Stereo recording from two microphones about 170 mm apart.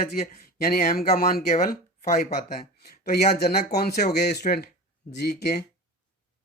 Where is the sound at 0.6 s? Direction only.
60° left (ahead or behind).